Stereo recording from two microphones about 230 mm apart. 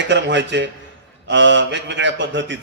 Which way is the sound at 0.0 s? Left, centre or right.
Right.